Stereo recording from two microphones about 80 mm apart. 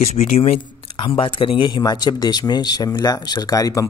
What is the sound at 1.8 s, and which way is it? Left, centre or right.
Speech, left.